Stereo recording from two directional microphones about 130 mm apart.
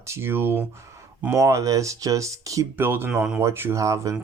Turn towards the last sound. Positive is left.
turn(degrees=-25)  # may be behind; listen again after turning